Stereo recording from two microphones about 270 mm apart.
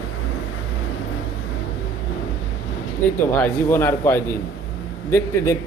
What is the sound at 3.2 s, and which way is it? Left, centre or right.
A man's voice, centre.